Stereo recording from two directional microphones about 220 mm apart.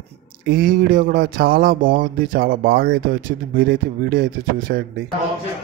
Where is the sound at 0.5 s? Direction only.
40° right (ahead or behind).